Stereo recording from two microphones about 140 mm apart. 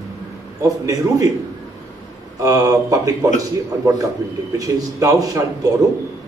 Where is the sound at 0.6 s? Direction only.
25° right (ahead or behind).